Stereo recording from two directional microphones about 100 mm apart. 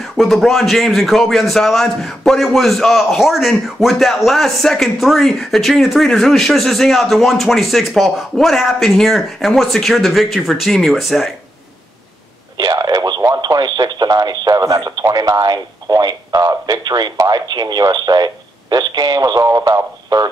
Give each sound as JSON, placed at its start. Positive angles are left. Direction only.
{"t": 0.0, "sound": "speech", "side_deg": 0}
{"t": 12.5, "sound": "a sound", "side_deg": -40}
{"t": 13.4, "sound": "speech", "side_deg": -45}